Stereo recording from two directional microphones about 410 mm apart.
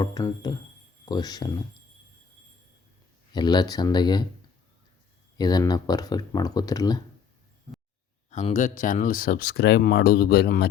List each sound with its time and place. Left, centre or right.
0.0 s speech: centre
3.3 s speech: centre
5.4 s speech: centre
8.3 s speech: centre